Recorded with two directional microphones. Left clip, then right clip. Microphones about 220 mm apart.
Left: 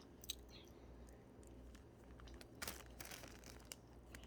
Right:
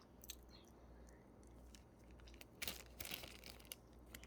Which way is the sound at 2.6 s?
20° right (ahead or behind).